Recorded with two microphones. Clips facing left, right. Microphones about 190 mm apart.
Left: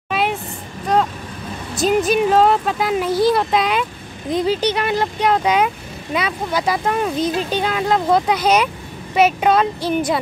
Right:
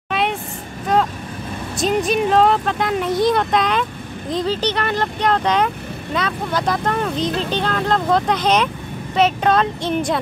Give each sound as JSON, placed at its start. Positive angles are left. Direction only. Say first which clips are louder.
{"t": 0.1, "sound": "vehicle", "louder": "left 1 dB", "side_deg": 5}
{"t": 1.8, "sound": "speech", "louder": "left 2 dB", "side_deg": 0}